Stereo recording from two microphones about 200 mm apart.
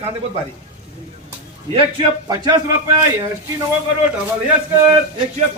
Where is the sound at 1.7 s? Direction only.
25° right (ahead or behind).